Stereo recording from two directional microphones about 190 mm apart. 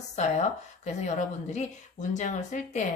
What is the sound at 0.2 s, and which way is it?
Speech, 35° left (ahead or behind).